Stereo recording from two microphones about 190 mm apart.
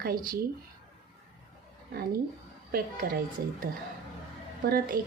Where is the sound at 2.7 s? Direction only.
50° right (ahead or behind).